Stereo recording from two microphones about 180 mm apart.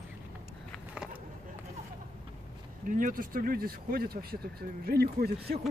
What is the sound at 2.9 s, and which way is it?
Speech, 50° right (ahead or behind).